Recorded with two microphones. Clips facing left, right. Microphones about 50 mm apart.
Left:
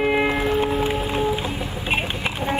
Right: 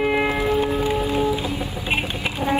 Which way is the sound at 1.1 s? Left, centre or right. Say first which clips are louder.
Right 1 dB; left.